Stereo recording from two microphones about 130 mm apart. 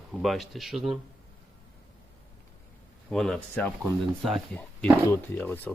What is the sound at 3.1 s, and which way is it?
Speech, 5° left (ahead or behind).